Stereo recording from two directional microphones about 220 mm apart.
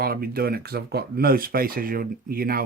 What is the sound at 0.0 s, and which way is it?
Speech, 45° right (ahead or behind).